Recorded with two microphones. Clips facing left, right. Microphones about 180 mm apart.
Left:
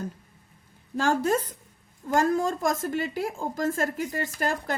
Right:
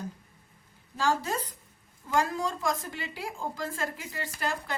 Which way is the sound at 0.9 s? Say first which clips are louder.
Left 5 dB; 50° left (ahead or behind).